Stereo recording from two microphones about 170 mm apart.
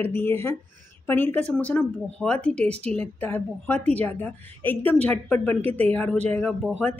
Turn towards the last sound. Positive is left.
turn(degrees=5)  # may be behind; listen again after turning